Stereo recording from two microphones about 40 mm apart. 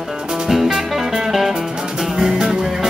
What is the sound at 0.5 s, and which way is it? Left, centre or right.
Music, centre.